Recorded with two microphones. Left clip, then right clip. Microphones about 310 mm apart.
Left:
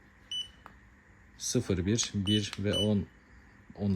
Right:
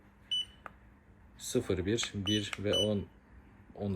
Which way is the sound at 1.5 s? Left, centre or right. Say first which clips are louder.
Even; left.